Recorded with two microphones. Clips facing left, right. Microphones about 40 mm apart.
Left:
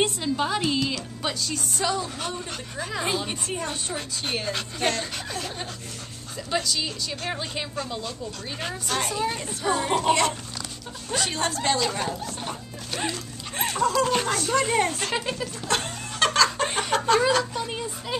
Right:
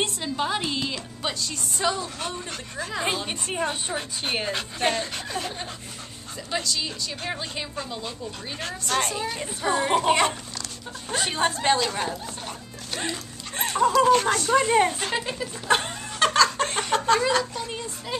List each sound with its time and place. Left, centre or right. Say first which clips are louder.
0.0 s a woman's voice: left 2 dB; centre
3.3 s a woman's voice: right 3 dB; right; by 15.4 s centre
15.4 s a sound: right 3 dB; centre